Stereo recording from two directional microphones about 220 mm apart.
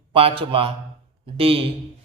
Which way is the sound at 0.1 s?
25° right (ahead or behind).